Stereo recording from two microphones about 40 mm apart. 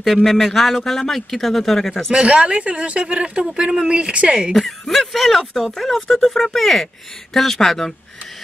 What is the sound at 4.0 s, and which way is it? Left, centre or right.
Speech, right.